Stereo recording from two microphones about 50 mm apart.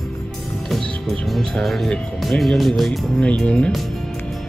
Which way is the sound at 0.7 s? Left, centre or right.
Centre.